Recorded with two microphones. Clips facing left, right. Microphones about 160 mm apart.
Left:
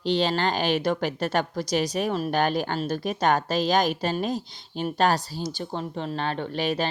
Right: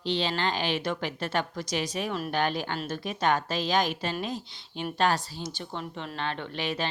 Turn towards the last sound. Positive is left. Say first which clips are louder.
# left 6 dB
turn(degrees=40)  # may be behind; listen again after turning